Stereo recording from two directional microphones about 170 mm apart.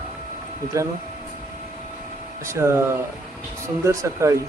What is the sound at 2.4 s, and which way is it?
Speech, 15° right (ahead or behind).